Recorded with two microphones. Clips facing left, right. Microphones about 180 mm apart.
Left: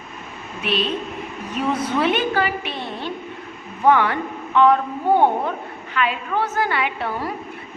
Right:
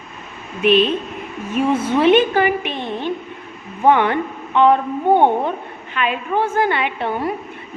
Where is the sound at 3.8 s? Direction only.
20° right (ahead or behind).